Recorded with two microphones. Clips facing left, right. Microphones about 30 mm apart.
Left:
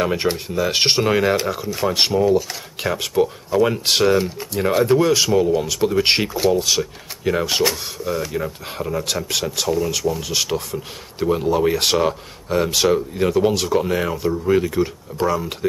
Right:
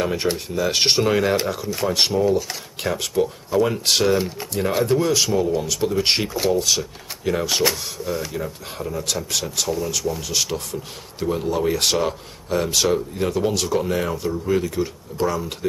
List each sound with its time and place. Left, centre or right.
0.0 s speech: centre
6.3 s speech: centre
6.6 s speech: centre
8.4 s speech: left